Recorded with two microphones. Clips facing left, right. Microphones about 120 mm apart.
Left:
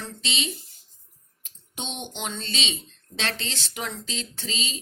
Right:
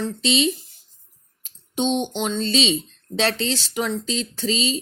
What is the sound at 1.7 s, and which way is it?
Speech, 30° right (ahead or behind).